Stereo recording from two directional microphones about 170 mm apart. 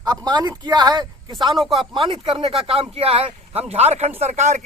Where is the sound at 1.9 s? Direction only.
25° right (ahead or behind).